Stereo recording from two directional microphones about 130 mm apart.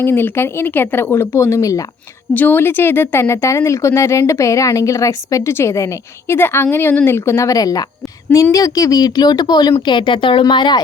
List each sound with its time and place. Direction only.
0.0 s speech: 15° left (ahead or behind); by 10.8 s 35° left (ahead or behind)